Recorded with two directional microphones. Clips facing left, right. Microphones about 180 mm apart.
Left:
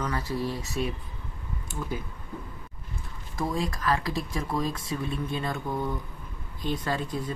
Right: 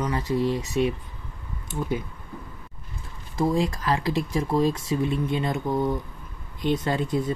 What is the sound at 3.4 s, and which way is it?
Speech, 25° right (ahead or behind).